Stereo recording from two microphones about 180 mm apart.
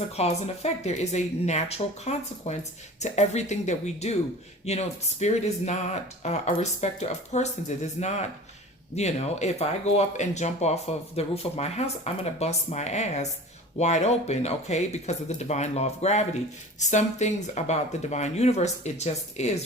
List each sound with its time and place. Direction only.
0.2 s speech: 35° left (ahead or behind)